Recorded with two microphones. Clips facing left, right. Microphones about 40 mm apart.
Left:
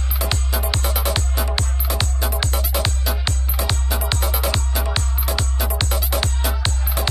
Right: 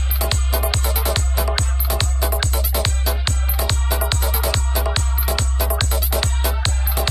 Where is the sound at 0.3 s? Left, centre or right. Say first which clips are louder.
Right 1 dB; centre.